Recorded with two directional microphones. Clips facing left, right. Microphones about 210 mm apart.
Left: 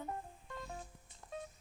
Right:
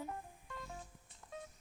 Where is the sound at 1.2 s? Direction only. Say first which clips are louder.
Left 3 dB; 40° left (ahead or behind).